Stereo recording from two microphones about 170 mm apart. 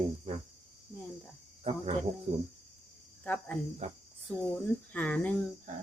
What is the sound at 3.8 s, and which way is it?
Speech, 40° right (ahead or behind).